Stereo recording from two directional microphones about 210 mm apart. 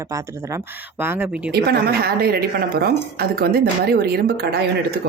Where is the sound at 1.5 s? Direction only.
50° right (ahead or behind).